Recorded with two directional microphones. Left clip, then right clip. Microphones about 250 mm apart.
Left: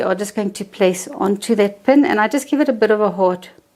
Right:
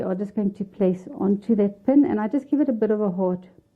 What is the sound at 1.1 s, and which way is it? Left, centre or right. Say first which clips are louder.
Speech: left 6 dB; centre.